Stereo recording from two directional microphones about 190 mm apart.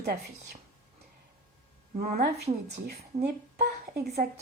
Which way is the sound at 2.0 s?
55° right (ahead or behind).